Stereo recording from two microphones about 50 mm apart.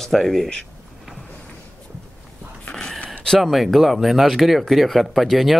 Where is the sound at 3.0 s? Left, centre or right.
Centre.